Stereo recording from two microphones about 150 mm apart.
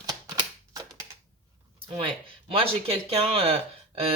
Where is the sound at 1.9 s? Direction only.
35° right (ahead or behind).